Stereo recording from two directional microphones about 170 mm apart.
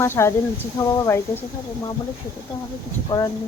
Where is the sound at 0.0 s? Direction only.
15° left (ahead or behind).